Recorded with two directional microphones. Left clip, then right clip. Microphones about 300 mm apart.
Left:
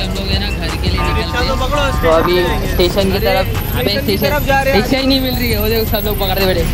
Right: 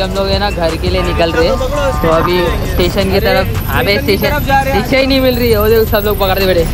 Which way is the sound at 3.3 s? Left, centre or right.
Right.